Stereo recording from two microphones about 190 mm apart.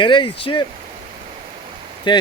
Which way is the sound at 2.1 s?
25° left (ahead or behind).